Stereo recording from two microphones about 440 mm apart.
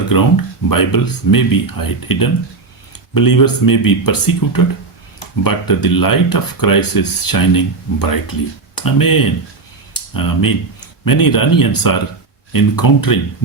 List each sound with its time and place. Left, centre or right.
0.1 s speech: left